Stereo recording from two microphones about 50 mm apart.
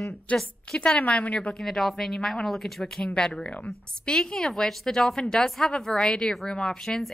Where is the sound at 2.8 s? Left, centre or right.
Centre.